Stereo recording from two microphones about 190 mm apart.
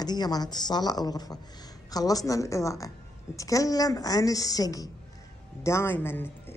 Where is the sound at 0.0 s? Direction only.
20° left (ahead or behind).